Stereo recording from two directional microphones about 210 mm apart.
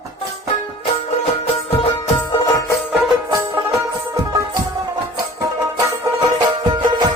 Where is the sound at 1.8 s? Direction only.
25° left (ahead or behind).